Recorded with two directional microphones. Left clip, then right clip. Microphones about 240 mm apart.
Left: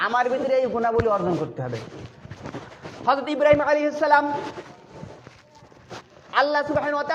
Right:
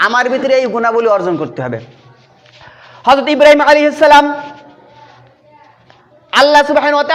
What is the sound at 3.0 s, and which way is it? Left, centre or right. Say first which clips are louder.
A man's voice: right 13 dB; right.